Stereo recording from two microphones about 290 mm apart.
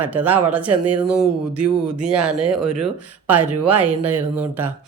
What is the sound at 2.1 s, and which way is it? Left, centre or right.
Speech, right.